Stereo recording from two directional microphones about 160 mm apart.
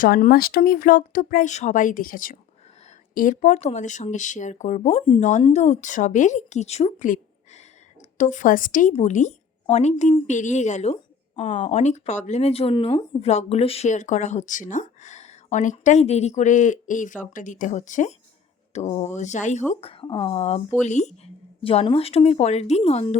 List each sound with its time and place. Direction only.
0.0 s speech: 65° left (ahead or behind); by 19.6 s 45° left (ahead or behind)
19.8 s speech: 35° left (ahead or behind)
21.6 s speech: 35° left (ahead or behind)